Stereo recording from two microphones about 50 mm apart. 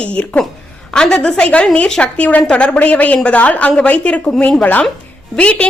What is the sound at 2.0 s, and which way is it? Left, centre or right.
A woman's voice, left.